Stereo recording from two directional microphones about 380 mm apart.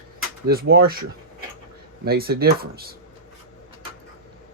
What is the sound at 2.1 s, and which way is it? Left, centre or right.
Speech, right.